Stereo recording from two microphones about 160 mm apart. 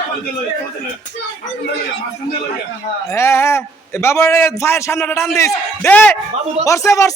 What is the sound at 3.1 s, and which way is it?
A man's voice, 15° left (ahead or behind).